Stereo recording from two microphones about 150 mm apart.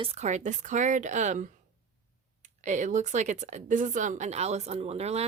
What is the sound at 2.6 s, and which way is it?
Speech, 55° right (ahead or behind).